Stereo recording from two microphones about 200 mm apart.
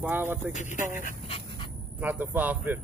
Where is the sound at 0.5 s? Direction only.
40° left (ahead or behind).